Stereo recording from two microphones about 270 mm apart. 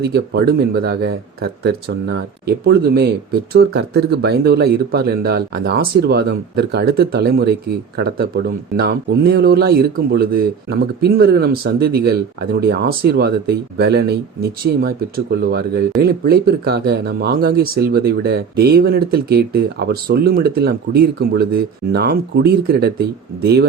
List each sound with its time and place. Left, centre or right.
0.0 s speech: right